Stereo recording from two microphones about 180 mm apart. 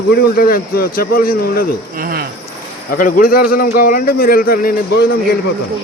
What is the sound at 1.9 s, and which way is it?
Speech, 55° right (ahead or behind).